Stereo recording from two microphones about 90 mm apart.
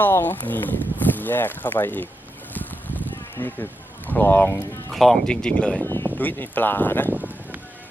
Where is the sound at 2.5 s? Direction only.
20° left (ahead or behind).